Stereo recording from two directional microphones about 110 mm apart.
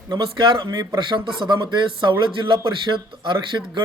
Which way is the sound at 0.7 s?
35° right (ahead or behind).